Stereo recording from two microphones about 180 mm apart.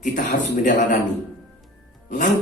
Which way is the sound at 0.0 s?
45° left (ahead or behind).